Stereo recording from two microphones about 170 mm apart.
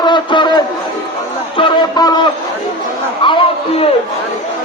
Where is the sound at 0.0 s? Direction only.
25° left (ahead or behind).